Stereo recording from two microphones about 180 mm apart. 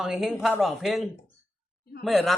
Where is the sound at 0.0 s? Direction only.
5° right (ahead or behind).